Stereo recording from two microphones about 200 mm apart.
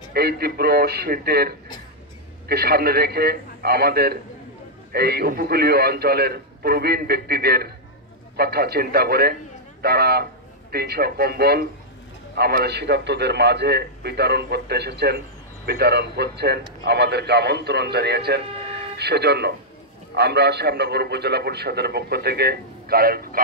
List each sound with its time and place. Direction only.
0.1 s a man's voice: 50° right (ahead or behind)